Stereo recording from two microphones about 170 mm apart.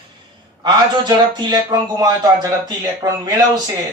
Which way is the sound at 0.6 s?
25° right (ahead or behind).